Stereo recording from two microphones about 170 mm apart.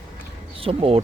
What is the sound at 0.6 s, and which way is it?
Speech, 35° right (ahead or behind).